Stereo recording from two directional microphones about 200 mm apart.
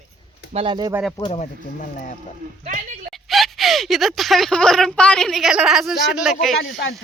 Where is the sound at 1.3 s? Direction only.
40° left (ahead or behind).